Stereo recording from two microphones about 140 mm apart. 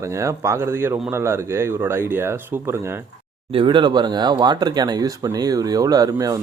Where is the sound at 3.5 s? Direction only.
35° right (ahead or behind).